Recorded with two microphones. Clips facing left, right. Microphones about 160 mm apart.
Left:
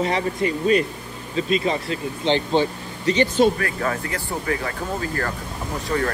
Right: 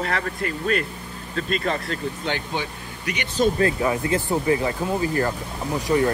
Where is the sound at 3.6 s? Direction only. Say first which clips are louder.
Right 4 dB; 20° right (ahead or behind).